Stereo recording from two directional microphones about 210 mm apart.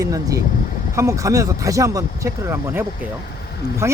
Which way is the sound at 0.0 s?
15° right (ahead or behind).